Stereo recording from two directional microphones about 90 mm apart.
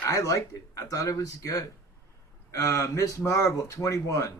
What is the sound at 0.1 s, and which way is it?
A man's voice, 40° left (ahead or behind).